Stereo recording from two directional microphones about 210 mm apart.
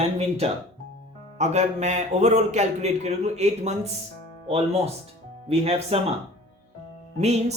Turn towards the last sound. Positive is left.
turn(degrees=-30)  # may be behind; listen again after turning